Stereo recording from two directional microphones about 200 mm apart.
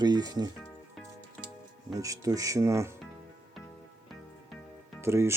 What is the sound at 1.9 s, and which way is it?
Speech, 15° right (ahead or behind).